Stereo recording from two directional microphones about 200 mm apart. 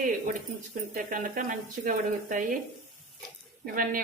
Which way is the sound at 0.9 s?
45° right (ahead or behind).